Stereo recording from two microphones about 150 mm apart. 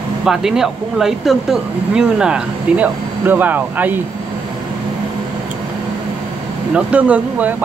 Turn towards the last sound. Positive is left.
turn(degrees=-10)  # may be behind; listen again after turning